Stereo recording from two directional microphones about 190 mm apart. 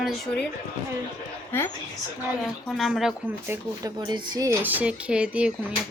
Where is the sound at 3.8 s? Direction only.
20° right (ahead or behind).